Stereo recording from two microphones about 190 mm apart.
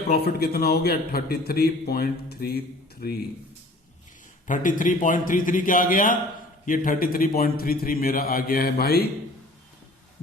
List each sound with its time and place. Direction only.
0.1 s a man's voice: 55° left (ahead or behind)
4.4 s a man's voice: 45° left (ahead or behind)